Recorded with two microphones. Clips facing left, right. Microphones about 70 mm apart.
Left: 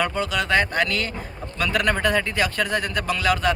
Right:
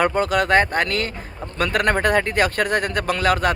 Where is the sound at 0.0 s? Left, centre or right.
Right.